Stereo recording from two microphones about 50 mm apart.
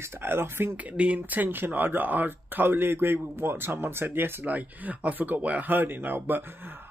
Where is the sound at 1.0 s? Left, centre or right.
Right.